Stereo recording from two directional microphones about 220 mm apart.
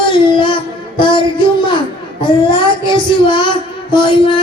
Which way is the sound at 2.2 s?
20° left (ahead or behind).